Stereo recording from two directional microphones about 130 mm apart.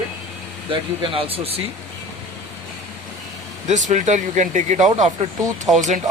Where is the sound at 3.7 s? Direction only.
70° right (ahead or behind).